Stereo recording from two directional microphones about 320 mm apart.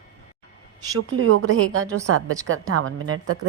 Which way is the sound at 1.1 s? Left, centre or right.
Right.